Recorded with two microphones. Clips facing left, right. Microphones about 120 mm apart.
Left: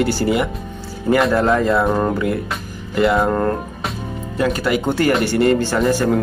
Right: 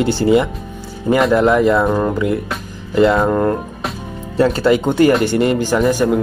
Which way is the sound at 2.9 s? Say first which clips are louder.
Right 3 dB; 25° right (ahead or behind).